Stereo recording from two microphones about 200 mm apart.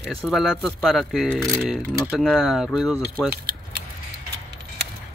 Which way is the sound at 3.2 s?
50° right (ahead or behind).